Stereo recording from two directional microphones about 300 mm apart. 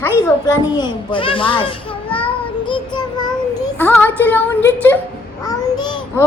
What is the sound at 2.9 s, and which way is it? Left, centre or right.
Child singing, centre.